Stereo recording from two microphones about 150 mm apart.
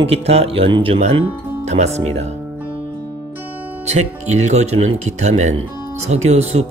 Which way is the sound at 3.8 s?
45° right (ahead or behind).